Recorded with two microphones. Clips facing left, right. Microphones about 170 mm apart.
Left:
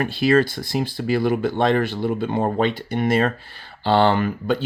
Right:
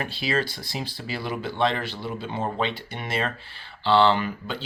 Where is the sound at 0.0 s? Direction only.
50° left (ahead or behind).